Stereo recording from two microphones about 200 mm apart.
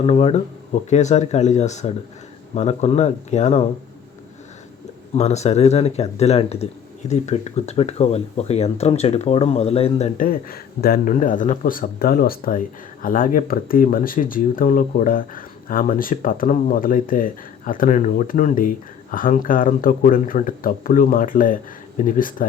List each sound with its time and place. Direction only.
0.0 s speech: 30° left (ahead or behind)
5.1 s speech: 35° left (ahead or behind)
10.2 s speech: 45° left (ahead or behind)